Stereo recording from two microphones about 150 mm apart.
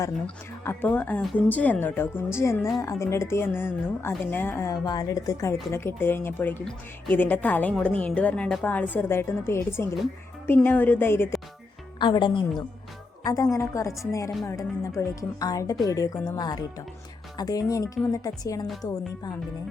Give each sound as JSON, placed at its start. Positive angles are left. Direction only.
{"t": 0.6, "sound": "a woman's voice", "side_deg": 15}
{"t": 11.9, "sound": "a woman's voice", "side_deg": 30}